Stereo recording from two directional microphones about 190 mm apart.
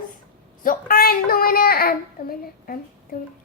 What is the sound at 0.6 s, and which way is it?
A woman's voice, 50° left (ahead or behind).